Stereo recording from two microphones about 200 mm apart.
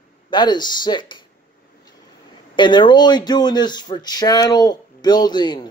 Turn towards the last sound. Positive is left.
turn(degrees=20)  # may be behind; listen again after turning